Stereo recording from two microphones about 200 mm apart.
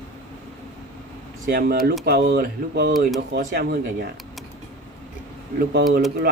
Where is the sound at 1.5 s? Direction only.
50° right (ahead or behind).